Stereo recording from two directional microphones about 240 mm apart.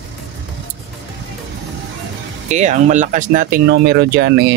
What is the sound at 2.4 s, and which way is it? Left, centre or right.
Speech, right.